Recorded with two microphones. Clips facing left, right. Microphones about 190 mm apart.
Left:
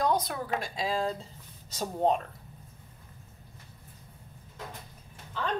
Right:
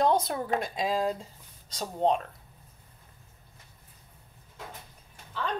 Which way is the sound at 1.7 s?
5° left (ahead or behind).